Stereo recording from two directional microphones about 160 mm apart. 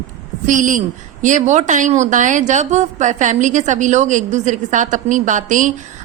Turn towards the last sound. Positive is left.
turn(degrees=-50)  # may be behind; listen again after turning